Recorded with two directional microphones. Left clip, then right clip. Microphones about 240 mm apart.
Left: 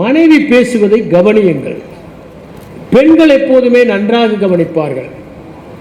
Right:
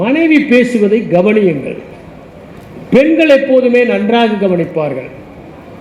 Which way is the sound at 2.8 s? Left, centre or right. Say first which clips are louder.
Left 2 dB; left.